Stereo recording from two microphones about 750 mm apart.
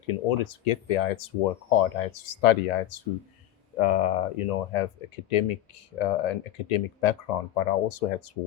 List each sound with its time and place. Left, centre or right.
0.1 s speech: left